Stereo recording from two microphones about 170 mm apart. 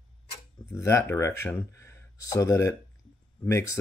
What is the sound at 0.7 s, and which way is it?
Speech, 15° left (ahead or behind).